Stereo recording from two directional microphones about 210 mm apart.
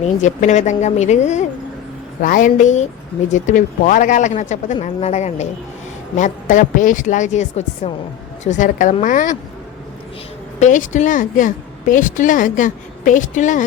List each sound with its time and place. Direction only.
0.0 s a woman's voice: 35° left (ahead or behind)
10.6 s a woman's voice: 35° left (ahead or behind)